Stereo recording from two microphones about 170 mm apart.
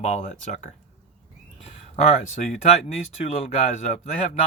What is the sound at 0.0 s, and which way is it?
A man's voice, 45° left (ahead or behind).